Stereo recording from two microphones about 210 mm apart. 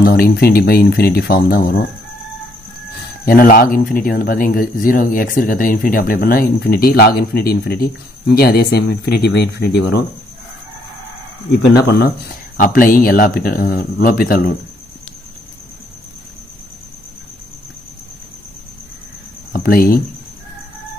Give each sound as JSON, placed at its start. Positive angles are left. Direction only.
{"t": 0.0, "sound": "speech", "side_deg": 50}
{"t": 3.3, "sound": "speech", "side_deg": 45}
{"t": 11.7, "sound": "speech", "side_deg": 50}
{"t": 19.5, "sound": "speech", "side_deg": 45}